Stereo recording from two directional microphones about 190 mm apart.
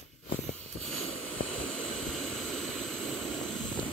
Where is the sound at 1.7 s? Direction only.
5° left (ahead or behind).